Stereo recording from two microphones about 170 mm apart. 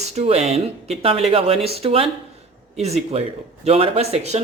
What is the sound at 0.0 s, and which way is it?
Speech, 40° right (ahead or behind).